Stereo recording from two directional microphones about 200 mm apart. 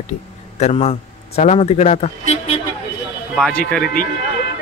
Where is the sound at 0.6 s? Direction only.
35° left (ahead or behind).